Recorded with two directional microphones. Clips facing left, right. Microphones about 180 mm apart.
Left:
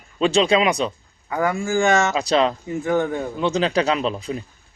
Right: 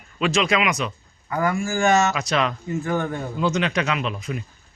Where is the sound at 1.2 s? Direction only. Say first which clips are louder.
Left 1 dB; 20° left (ahead or behind).